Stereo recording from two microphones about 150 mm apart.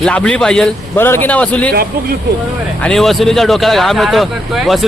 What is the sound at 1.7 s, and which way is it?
Speech, 90° right.